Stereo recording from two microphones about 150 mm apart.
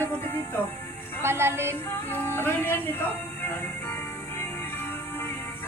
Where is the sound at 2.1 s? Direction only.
15° left (ahead or behind).